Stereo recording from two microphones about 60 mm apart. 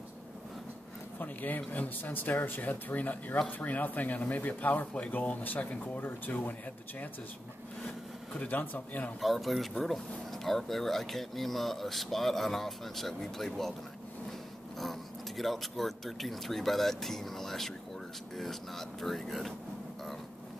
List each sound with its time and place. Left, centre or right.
1.2 s speech: left
8.4 s speech: left
9.2 s speech: centre
14.8 s speech: centre